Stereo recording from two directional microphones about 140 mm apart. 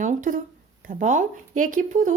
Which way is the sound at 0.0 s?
65° right (ahead or behind).